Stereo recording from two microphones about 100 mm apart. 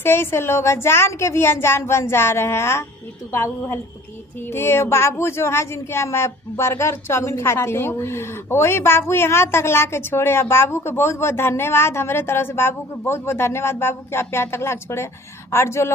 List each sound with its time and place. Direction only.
0.0 s speech: 25° left (ahead or behind)